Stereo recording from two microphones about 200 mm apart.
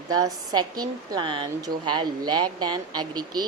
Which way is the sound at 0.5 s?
20° right (ahead or behind).